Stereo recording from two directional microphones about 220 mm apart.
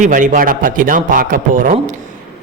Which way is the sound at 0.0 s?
35° right (ahead or behind).